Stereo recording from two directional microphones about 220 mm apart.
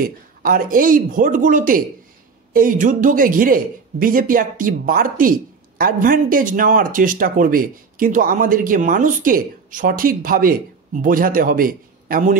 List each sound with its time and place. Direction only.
0.0 s speech: 40° right (ahead or behind)